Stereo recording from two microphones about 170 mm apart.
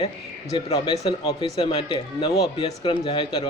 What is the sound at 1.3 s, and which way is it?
A man's voice, 20° left (ahead or behind).